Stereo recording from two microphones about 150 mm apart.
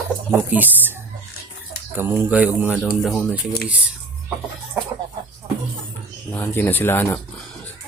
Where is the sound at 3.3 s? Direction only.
90° left.